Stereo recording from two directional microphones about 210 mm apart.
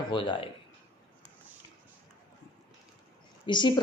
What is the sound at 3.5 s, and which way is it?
Speech, 20° left (ahead or behind).